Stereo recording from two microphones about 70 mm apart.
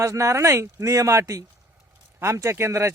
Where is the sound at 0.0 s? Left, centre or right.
Right.